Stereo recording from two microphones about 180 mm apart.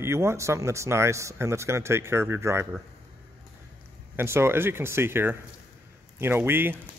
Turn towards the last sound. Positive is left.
turn(degrees=-10)  # may be behind; listen again after turning